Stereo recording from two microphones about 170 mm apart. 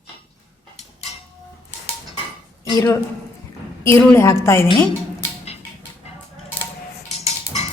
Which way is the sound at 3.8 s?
15° left (ahead or behind).